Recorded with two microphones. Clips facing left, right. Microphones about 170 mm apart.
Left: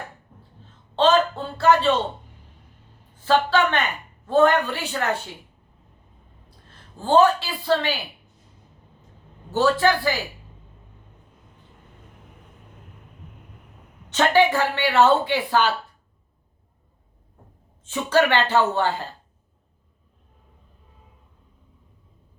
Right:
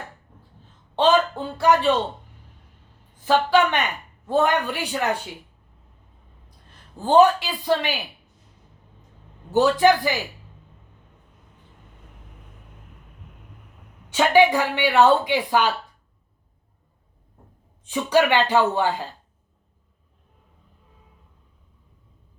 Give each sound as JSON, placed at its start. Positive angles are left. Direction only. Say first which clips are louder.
{"t": 0.9, "sound": "a sound", "louder": "even", "side_deg": -15}
{"t": 3.2, "sound": "a woman's voice", "louder": "right 1 dB", "side_deg": -15}
{"t": 6.7, "sound": "speech", "louder": "even", "side_deg": -15}
{"t": 9.5, "sound": "a woman's voice", "louder": "right 3 dB", "side_deg": -15}
{"t": 14.1, "sound": "speech", "louder": "right 2 dB", "side_deg": -10}
{"t": 17.8, "sound": "a woman's voice", "louder": "right 1 dB", "side_deg": -15}